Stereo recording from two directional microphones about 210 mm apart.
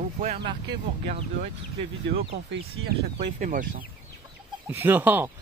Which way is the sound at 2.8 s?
60° right (ahead or behind).